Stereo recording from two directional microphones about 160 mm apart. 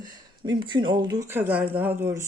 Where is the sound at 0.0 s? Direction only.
30° right (ahead or behind).